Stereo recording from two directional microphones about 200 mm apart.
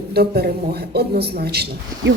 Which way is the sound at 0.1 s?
50° right (ahead or behind).